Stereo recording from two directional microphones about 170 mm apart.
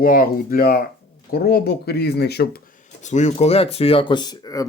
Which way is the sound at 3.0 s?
45° left (ahead or behind).